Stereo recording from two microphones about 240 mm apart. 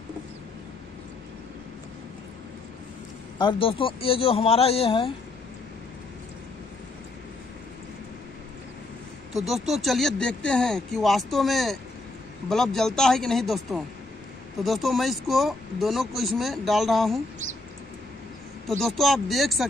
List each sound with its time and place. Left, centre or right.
3.3 s a man's voice: left
9.5 s speech: centre
18.7 s speech: centre